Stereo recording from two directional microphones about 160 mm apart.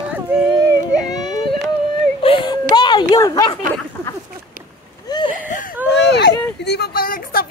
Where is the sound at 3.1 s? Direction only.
20° left (ahead or behind).